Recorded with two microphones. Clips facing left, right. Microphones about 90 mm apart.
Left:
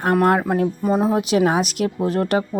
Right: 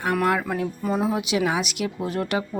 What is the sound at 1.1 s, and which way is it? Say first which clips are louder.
A woman's voice: left 6 dB; 40° left (ahead or behind).